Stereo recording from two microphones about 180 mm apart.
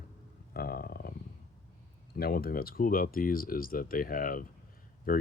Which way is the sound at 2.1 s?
60° left (ahead or behind).